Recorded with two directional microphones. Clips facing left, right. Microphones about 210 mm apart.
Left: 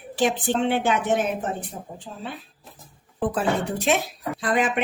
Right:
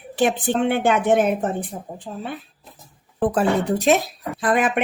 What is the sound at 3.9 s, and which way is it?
Speech, 45° right (ahead or behind).